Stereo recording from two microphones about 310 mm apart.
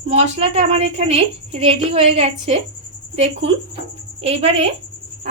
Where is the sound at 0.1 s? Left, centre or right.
Right.